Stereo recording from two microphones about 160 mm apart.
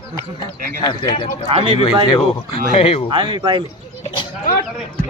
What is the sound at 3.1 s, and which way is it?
Speech, 30° right (ahead or behind).